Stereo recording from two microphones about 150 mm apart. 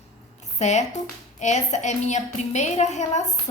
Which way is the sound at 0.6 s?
50° left (ahead or behind).